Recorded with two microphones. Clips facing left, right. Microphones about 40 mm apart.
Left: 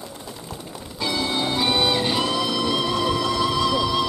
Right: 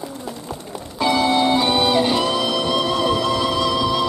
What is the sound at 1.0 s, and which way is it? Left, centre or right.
Music, centre.